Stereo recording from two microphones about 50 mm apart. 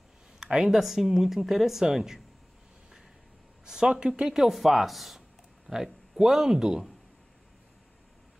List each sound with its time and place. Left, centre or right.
0.4 s speech: centre
3.6 s a sound: centre
4.2 s speech: centre